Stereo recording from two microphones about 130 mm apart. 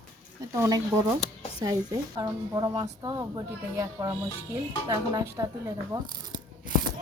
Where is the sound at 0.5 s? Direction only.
25° right (ahead or behind).